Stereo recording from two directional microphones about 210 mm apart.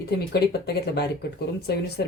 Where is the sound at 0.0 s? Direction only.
50° left (ahead or behind).